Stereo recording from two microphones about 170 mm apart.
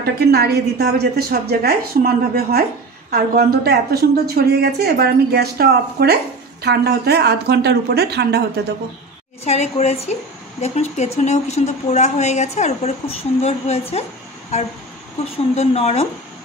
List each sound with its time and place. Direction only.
0.0 s a woman's voice: 70° right (ahead or behind)
9.4 s a woman's voice: 40° left (ahead or behind)